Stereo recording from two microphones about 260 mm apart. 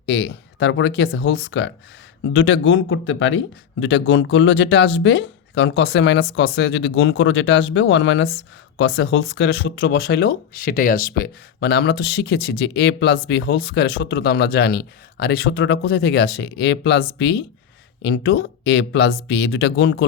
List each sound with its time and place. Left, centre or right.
0.0 s speech: left